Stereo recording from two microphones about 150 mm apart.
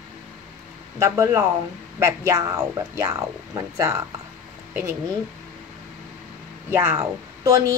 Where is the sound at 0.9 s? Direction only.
20° right (ahead or behind).